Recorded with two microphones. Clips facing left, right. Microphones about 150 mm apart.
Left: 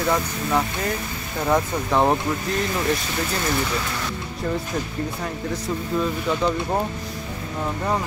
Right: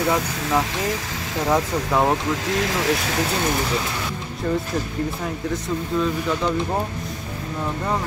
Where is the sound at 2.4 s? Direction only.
90° right.